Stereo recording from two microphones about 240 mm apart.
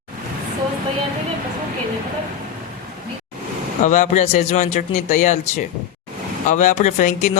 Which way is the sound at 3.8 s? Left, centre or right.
Left.